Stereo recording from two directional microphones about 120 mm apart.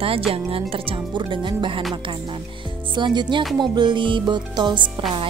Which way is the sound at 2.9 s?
40° right (ahead or behind).